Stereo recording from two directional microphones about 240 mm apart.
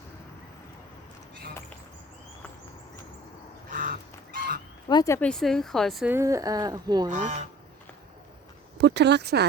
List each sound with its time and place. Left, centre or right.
3.7 s goose: right
4.9 s speech: centre
7.1 s speech: right
8.8 s speech: right